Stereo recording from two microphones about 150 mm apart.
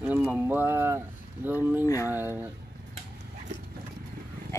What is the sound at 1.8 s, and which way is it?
Speech, 20° left (ahead or behind).